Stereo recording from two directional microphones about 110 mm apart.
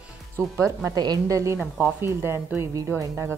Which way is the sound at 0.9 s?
35° right (ahead or behind).